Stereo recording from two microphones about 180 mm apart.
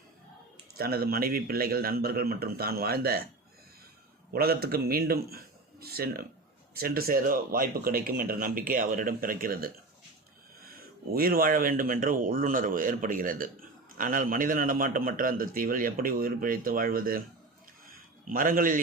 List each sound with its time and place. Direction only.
0.8 s a man's voice: 55° right (ahead or behind)
4.3 s a man's voice: 60° right (ahead or behind)
11.1 s a man's voice: 55° right (ahead or behind)
18.3 s a man's voice: 50° right (ahead or behind)